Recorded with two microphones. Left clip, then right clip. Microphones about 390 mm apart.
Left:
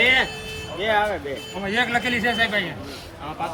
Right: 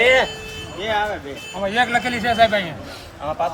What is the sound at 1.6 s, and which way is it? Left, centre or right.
Speech, centre.